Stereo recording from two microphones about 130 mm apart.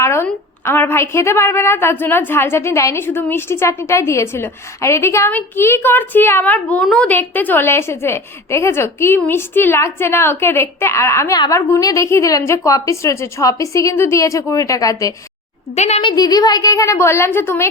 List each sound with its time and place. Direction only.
0.0 s a woman's voice: 20° left (ahead or behind)
15.7 s a woman's voice: 60° left (ahead or behind)
16.0 s a woman's voice: 35° left (ahead or behind); by 17.7 s 15° left (ahead or behind)